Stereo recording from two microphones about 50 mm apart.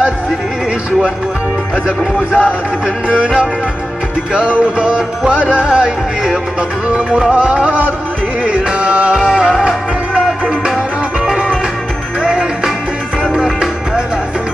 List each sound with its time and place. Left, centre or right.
2.1 s speech: left
4.3 s music: right
12.2 s music: centre